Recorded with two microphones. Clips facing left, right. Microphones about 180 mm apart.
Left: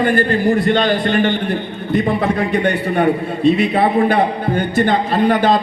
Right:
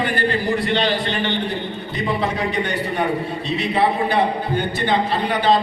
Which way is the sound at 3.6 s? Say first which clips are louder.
Left 5 dB; 55° left (ahead or behind).